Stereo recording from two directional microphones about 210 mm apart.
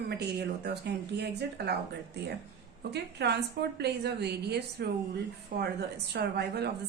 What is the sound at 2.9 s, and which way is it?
A woman's voice, 55° right (ahead or behind).